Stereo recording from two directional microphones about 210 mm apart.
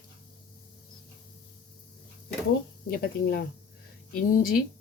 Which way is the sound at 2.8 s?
45° left (ahead or behind).